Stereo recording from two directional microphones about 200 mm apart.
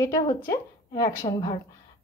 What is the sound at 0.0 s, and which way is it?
A woman's voice, 15° left (ahead or behind).